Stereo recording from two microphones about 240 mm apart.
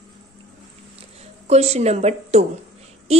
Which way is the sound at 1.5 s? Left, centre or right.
Right.